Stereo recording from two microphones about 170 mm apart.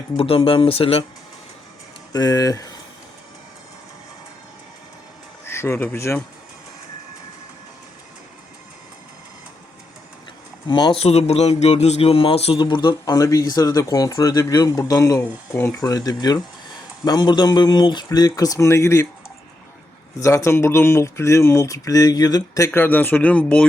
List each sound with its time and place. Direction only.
0.2 s speech: 30° left (ahead or behind)
2.1 s speech: 20° left (ahead or behind)
5.5 s speech: 15° left (ahead or behind)
10.7 s speech: 25° left (ahead or behind)
20.1 s speech: 15° left (ahead or behind)